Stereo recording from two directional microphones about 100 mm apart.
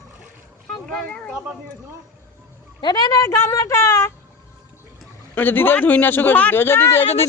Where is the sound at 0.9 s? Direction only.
10° left (ahead or behind).